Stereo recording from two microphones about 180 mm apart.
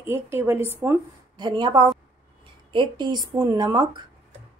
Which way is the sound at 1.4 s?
25° right (ahead or behind).